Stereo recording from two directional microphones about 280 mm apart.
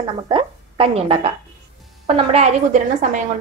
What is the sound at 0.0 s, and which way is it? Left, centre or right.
Speech, centre.